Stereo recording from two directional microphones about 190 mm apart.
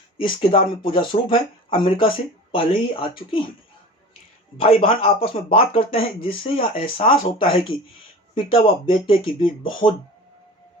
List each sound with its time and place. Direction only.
0.2 s speech: 25° left (ahead or behind)
4.6 s speech: 30° left (ahead or behind)